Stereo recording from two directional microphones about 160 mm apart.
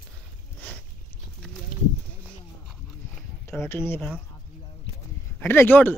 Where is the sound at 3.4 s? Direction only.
15° left (ahead or behind).